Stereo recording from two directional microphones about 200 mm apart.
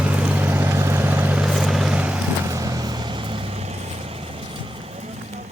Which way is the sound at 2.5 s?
15° right (ahead or behind).